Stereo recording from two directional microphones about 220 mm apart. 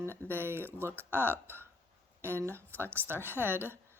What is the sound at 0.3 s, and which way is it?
Speech, 10° right (ahead or behind).